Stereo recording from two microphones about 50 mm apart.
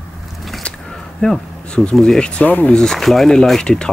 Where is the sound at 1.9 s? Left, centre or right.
Centre.